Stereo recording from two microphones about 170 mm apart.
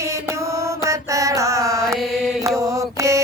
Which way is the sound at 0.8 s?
20° right (ahead or behind).